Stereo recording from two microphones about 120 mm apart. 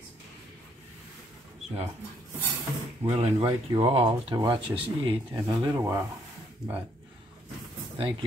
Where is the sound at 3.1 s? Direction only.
60° right (ahead or behind).